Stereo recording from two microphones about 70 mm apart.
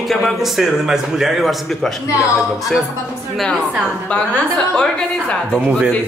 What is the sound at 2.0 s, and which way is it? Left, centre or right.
Speech, left.